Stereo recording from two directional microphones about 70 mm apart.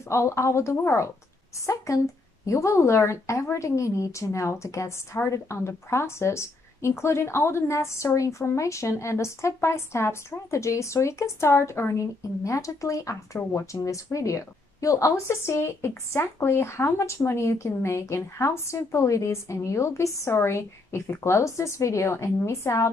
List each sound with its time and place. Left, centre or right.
0.1 s a woman's voice: left
2.4 s a woman's voice: left